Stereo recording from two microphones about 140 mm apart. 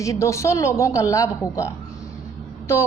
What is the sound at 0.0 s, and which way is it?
A woman's voice, 20° left (ahead or behind).